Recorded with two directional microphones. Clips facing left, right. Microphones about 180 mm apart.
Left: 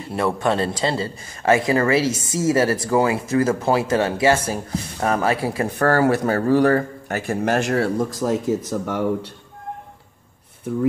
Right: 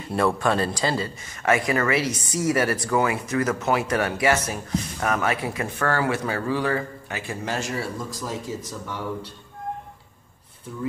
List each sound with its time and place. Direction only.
0.1 s a man's voice: 20° left (ahead or behind); by 9.3 s 60° left (ahead or behind)